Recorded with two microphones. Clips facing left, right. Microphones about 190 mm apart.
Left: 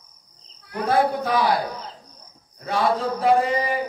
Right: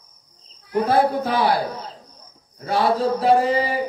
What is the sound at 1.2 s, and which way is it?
Speech, 30° right (ahead or behind).